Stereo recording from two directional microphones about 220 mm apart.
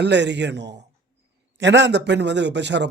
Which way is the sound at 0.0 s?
50° right (ahead or behind).